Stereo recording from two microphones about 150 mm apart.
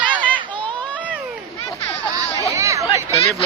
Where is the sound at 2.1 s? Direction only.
20° right (ahead or behind).